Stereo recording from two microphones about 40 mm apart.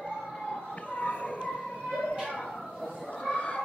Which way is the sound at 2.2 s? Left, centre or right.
Left.